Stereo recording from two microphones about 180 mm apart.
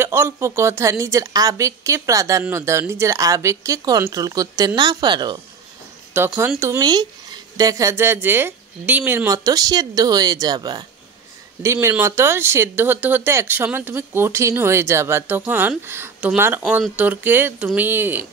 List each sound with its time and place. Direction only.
0.0 s speech: 15° right (ahead or behind)
6.1 s speech: 15° right (ahead or behind)